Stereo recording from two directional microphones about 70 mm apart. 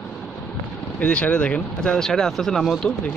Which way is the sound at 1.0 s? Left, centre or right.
Centre.